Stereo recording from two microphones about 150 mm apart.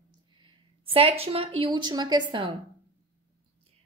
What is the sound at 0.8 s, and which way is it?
A woman's voice, 40° right (ahead or behind).